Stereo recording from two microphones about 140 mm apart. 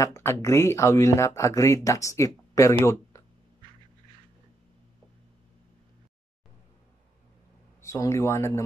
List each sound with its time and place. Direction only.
0.0 s speech: 20° left (ahead or behind)
7.8 s speech: 20° left (ahead or behind)